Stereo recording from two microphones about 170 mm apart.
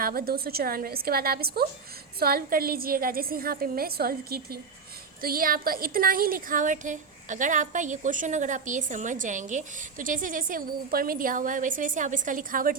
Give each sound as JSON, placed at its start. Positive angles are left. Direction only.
{"t": 0.0, "sound": "a woman's voice", "side_deg": -60}